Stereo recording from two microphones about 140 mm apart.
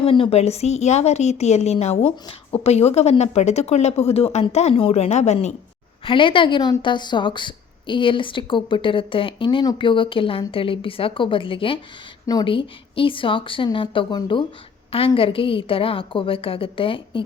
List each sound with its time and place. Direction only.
0.0 s a woman's voice: 40° left (ahead or behind)
6.1 s a woman's voice: 35° left (ahead or behind)
12.2 s a woman's voice: 30° left (ahead or behind)